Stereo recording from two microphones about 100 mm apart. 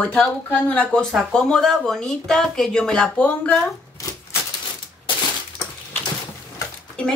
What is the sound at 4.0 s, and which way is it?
Typewriter, 35° left (ahead or behind).